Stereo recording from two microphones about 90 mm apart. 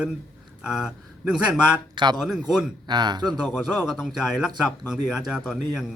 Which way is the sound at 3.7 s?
5° right (ahead or behind).